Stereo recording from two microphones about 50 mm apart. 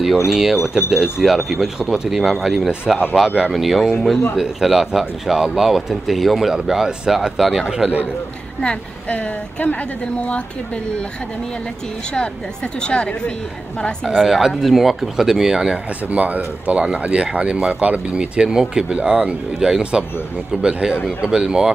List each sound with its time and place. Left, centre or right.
0.3 s speech: centre
7.6 s speech: centre
8.5 s a woman's voice: left
12.8 s a woman's voice: left
14.0 s speech: centre
16.1 s speech: right; by 21.7 s centre